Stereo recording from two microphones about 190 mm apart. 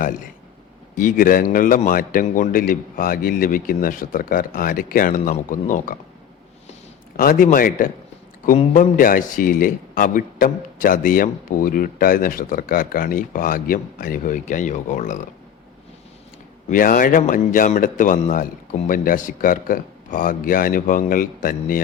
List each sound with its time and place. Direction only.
0.9 s speech: 45° left (ahead or behind)
7.2 s speech: 50° left (ahead or behind)
16.6 s speech: 45° left (ahead or behind)